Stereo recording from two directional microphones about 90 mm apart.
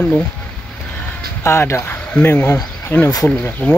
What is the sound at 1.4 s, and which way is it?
Speech, 30° left (ahead or behind).